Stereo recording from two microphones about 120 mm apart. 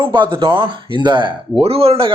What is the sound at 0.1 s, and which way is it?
Speech, 40° right (ahead or behind).